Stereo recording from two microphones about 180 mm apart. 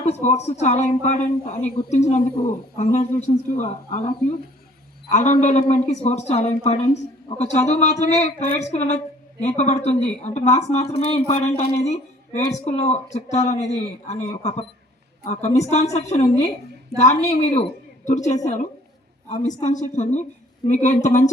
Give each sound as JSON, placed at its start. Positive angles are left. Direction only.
{"t": 0.0, "sound": "speech", "side_deg": 40}
{"t": 5.1, "sound": "a woman's voice", "side_deg": 40}